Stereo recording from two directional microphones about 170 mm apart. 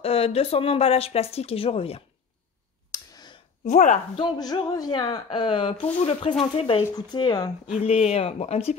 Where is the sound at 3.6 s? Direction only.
45° left (ahead or behind).